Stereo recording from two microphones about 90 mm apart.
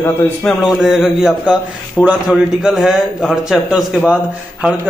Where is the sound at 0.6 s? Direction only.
5° right (ahead or behind).